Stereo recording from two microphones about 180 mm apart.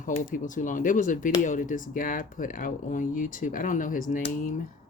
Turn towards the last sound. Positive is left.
turn(degrees=45)  # may be behind; listen again after turning